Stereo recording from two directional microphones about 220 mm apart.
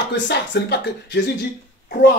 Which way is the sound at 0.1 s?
50° left (ahead or behind).